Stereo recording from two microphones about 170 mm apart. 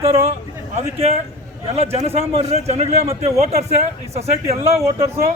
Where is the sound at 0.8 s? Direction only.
35° right (ahead or behind).